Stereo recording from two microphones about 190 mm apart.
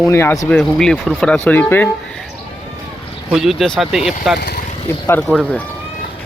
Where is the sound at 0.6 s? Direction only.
Centre (ahead or behind).